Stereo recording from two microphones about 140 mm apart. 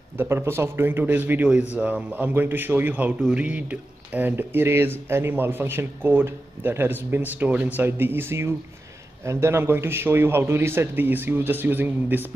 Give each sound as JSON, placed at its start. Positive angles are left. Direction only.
{"t": 0.2, "sound": "a man's voice", "side_deg": -15}